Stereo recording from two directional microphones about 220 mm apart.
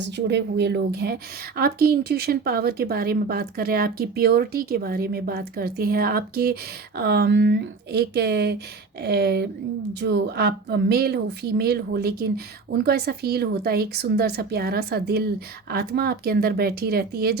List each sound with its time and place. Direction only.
0.0 s a woman's voice: 50° right (ahead or behind)